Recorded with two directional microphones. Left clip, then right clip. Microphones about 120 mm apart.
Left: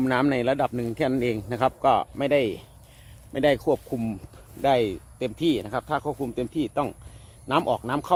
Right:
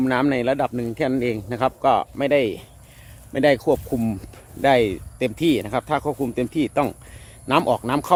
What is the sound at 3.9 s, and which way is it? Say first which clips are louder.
Speech: right 5 dB; 35° right (ahead or behind).